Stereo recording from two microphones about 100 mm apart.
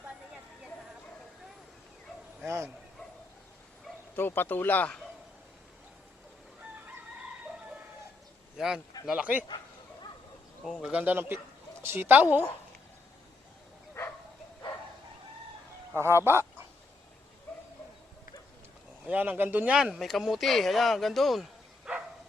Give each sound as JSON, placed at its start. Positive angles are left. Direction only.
{"t": 4.1, "sound": "speech", "side_deg": 20}
{"t": 8.5, "sound": "speech", "side_deg": -5}
{"t": 10.6, "sound": "speech", "side_deg": 0}
{"t": 16.0, "sound": "speech", "side_deg": -25}
{"t": 19.0, "sound": "speech", "side_deg": -15}
{"t": 19.7, "sound": "speech", "side_deg": -5}